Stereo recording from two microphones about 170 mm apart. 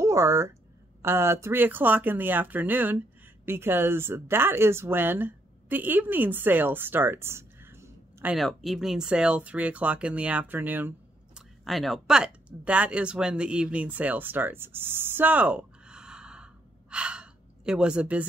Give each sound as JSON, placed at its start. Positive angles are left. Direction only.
{"t": 0.0, "sound": "speech", "side_deg": -15}
{"t": 8.4, "sound": "speech", "side_deg": 0}
{"t": 11.6, "sound": "speech", "side_deg": 0}